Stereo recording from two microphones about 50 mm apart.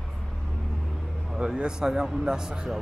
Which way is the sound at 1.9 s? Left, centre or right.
Centre.